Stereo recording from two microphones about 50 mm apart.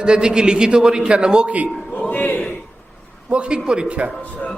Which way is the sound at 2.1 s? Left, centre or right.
Left.